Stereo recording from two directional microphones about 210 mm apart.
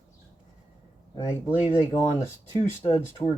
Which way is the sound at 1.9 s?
20° left (ahead or behind).